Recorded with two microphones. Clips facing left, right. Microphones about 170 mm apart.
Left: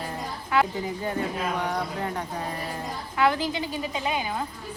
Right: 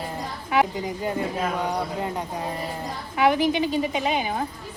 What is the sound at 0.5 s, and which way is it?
A woman's voice, 15° right (ahead or behind).